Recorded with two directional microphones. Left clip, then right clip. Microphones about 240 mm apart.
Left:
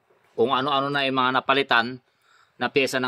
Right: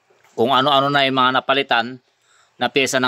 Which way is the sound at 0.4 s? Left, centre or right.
Right.